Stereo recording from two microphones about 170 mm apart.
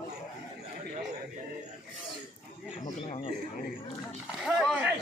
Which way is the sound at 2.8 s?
40° left (ahead or behind).